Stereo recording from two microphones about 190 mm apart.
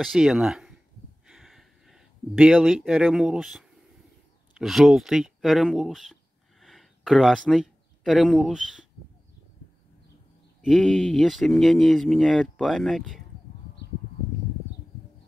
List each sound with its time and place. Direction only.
0.0 s speech: centre (ahead or behind)
1.2 s a sound: centre (ahead or behind)
4.6 s speech: centre (ahead or behind)
10.6 s speech: centre (ahead or behind)